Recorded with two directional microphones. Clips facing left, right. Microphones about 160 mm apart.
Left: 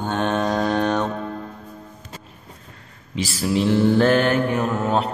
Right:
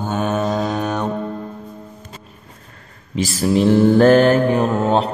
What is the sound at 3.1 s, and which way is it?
Mantra, 45° right (ahead or behind).